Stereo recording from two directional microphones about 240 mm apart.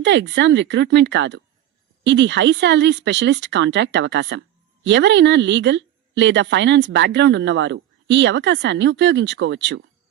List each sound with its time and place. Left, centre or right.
0.0 s speech: right